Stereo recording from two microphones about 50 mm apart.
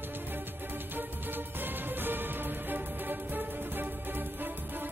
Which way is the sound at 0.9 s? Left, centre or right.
Right.